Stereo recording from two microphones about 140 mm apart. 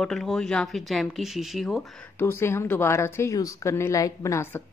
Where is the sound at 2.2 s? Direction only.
20° left (ahead or behind).